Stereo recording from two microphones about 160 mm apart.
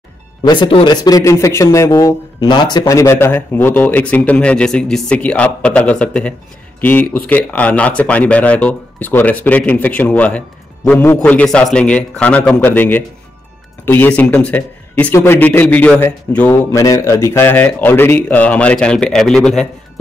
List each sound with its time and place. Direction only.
0.4 s speech: 30° left (ahead or behind)
2.8 s speech: 15° left (ahead or behind)